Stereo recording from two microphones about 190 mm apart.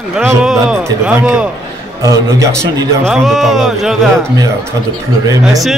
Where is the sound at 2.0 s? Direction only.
15° right (ahead or behind).